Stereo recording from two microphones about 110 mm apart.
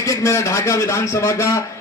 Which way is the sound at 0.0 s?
25° left (ahead or behind).